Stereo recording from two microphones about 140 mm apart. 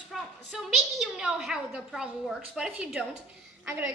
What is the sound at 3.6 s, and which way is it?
Speech, 15° right (ahead or behind).